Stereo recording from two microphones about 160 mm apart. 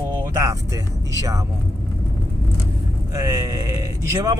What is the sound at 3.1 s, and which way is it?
Speech, 20° right (ahead or behind).